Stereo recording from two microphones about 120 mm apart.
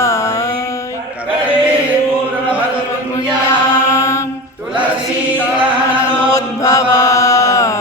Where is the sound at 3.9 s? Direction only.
25° left (ahead or behind).